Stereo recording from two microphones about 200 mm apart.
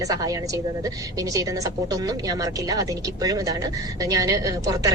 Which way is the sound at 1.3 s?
15° right (ahead or behind).